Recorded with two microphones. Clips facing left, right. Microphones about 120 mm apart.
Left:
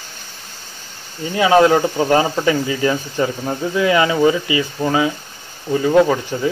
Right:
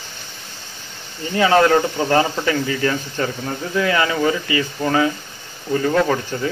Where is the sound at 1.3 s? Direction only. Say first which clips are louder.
Left 2 dB; 15° left (ahead or behind).